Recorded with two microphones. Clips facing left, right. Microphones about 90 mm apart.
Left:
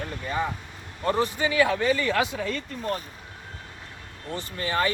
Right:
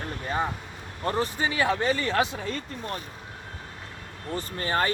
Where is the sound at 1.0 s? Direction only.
35° right (ahead or behind).